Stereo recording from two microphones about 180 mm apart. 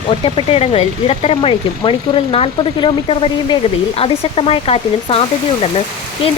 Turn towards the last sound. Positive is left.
turn(degrees=35)  # may be behind; listen again after turning